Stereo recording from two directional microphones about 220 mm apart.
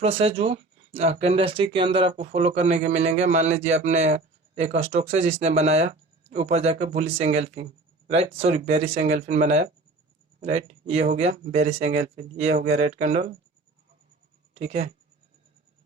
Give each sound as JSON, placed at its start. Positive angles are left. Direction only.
{"t": 0.0, "sound": "speech", "side_deg": -25}
{"t": 14.5, "sound": "speech", "side_deg": -30}